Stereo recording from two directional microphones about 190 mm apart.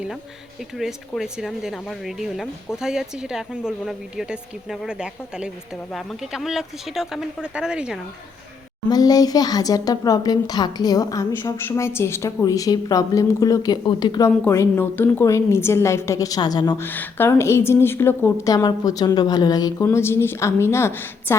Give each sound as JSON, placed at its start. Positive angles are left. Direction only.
{"t": 0.8, "sound": "a woman's voice", "side_deg": 0}
{"t": 8.9, "sound": "a woman's voice", "side_deg": 20}